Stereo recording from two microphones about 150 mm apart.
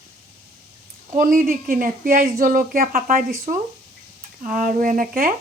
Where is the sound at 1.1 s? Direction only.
65° right (ahead or behind).